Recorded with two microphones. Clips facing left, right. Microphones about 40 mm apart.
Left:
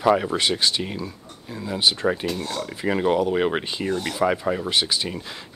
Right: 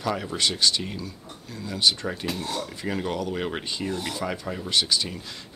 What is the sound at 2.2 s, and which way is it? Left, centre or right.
Speech, centre.